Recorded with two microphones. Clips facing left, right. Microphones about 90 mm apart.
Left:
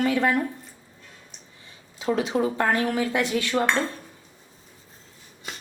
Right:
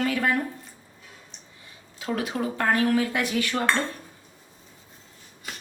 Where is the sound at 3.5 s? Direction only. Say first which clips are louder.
Left 3 dB; 5° left (ahead or behind).